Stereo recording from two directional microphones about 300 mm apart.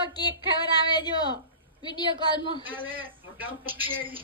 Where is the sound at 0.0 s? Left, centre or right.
Centre.